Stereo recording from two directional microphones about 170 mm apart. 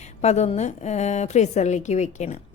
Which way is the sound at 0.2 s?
40° left (ahead or behind).